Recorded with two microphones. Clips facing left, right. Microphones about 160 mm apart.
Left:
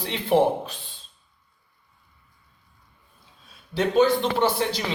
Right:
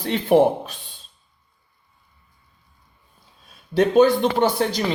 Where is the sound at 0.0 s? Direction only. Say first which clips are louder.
Right 4 dB; 50° right (ahead or behind).